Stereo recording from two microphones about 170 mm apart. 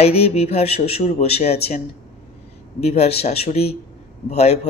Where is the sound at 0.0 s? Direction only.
35° left (ahead or behind).